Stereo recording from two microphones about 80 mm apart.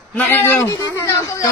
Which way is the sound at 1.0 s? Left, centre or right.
Left.